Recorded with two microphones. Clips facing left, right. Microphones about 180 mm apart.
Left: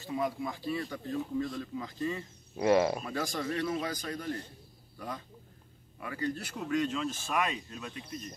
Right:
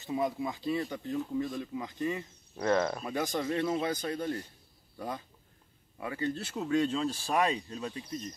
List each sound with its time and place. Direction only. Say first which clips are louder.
0.0 s speech: right 2 dB; 20° right (ahead or behind)
2.5 s speech: left 3 dB; 10° left (ahead or behind)
3.1 s a man's voice: right 2 dB; 20° right (ahead or behind)